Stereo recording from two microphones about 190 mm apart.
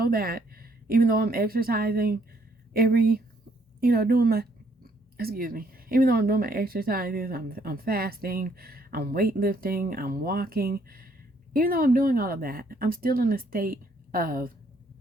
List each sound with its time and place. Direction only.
0.0 s a woman's voice: 50° right (ahead or behind)